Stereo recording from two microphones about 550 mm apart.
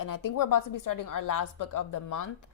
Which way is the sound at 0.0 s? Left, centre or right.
Left.